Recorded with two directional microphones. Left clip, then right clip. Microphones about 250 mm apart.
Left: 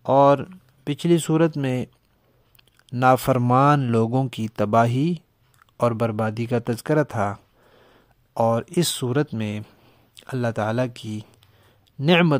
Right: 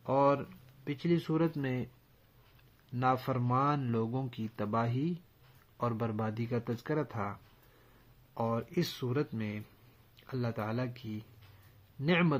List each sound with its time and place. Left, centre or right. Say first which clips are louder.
0.0 s speech: left 12 dB; left
2.9 s speech: left 14 dB; left
8.4 s speech: left 13 dB; left